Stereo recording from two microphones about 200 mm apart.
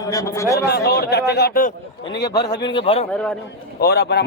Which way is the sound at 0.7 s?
55° left (ahead or behind).